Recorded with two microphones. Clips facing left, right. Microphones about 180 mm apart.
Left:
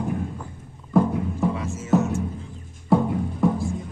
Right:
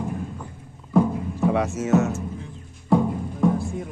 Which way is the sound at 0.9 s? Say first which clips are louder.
Even; 5° left (ahead or behind).